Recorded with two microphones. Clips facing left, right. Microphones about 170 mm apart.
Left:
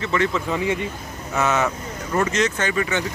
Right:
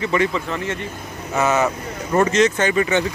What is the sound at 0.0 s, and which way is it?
Speech, 15° right (ahead or behind).